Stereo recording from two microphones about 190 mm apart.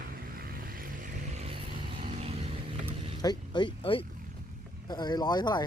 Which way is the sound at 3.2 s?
20° left (ahead or behind).